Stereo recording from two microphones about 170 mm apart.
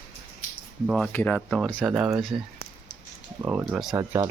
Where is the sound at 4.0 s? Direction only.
15° right (ahead or behind).